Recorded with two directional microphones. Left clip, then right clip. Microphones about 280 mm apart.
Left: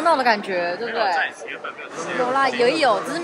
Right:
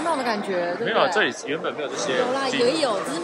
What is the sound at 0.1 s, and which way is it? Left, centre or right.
Speech, centre.